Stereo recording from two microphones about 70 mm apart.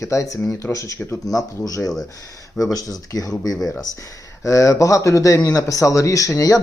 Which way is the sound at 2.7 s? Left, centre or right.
Left.